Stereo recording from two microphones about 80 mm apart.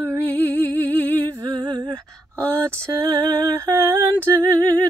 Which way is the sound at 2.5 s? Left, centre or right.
Right.